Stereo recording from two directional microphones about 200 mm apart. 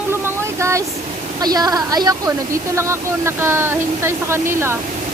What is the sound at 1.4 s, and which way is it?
A woman's voice, 20° right (ahead or behind).